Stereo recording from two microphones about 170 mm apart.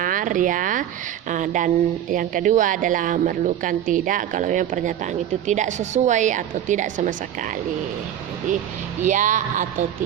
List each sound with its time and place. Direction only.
0.0 s speech: 50° right (ahead or behind)
9.0 s speech: 50° right (ahead or behind)